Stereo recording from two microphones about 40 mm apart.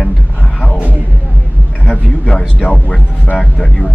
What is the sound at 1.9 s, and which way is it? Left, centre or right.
Speech, left.